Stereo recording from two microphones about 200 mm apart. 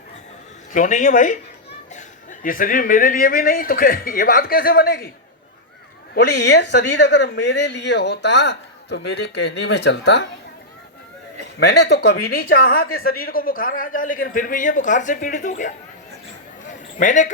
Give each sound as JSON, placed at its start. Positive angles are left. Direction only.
{"t": 0.7, "sound": "speech", "side_deg": 40}
{"t": 6.1, "sound": "speech", "side_deg": 55}
{"t": 11.6, "sound": "speech", "side_deg": 55}
{"t": 17.0, "sound": "speech", "side_deg": 40}